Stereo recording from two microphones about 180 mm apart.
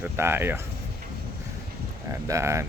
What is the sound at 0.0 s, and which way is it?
Speech, 15° right (ahead or behind).